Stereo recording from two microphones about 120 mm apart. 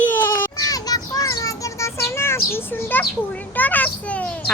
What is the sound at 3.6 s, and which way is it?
Speech, 15° left (ahead or behind).